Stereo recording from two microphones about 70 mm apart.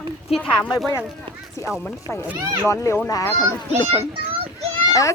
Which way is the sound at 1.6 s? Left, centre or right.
Left.